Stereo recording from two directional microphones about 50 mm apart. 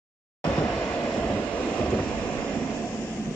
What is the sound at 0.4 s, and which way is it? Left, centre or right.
Vehicle, left.